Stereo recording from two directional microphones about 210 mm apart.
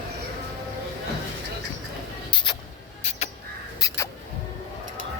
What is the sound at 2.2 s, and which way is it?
Vehicle, 20° left (ahead or behind).